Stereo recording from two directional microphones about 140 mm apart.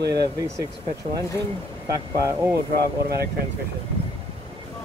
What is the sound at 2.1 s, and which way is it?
Speech, 25° right (ahead or behind).